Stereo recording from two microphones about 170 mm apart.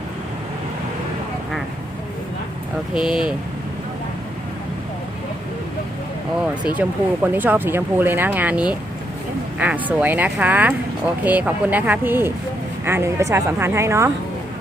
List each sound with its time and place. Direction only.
3.0 s speech: 5° right (ahead or behind)
6.7 s speech: 10° right (ahead or behind)